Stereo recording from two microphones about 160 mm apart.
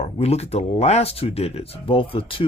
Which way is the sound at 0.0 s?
40° left (ahead or behind).